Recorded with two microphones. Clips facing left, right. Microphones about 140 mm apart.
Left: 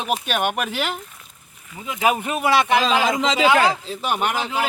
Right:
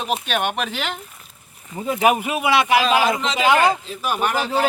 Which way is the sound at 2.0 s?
15° right (ahead or behind).